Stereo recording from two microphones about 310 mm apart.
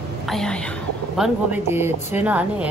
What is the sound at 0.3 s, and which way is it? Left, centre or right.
A woman's voice, centre.